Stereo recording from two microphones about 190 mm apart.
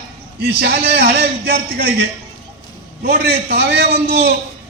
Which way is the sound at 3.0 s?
55° right (ahead or behind).